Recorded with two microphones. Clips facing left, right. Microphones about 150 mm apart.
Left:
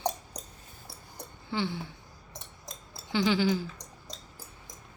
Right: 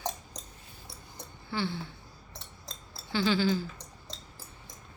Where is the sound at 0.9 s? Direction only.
15° left (ahead or behind).